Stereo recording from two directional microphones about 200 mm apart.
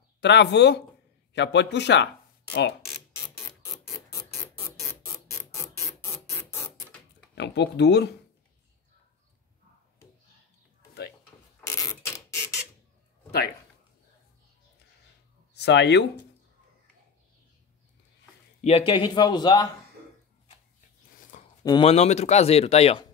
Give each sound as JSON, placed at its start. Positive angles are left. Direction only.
{"t": 0.2, "sound": "a man's voice", "side_deg": 60}
{"t": 4.8, "sound": "a sound", "side_deg": 15}
{"t": 7.3, "sound": "a man's voice", "side_deg": 60}
{"t": 11.6, "sound": "printer", "side_deg": 15}
{"t": 15.5, "sound": "speech", "side_deg": 60}
{"t": 18.6, "sound": "speech", "side_deg": 30}
{"t": 21.2, "sound": "a sound", "side_deg": 40}
{"t": 21.6, "sound": "speech", "side_deg": 25}